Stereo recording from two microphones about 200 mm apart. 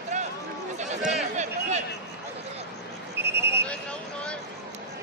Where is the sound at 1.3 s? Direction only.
35° right (ahead or behind).